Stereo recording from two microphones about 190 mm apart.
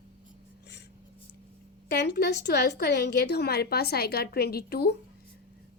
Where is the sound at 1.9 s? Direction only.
60° left (ahead or behind).